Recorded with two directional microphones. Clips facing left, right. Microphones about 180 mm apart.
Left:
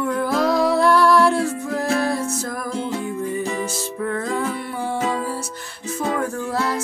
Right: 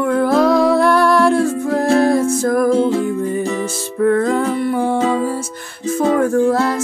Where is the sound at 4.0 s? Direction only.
55° right (ahead or behind).